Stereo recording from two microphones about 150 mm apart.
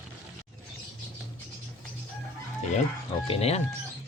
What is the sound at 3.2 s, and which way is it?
Speech, 40° left (ahead or behind).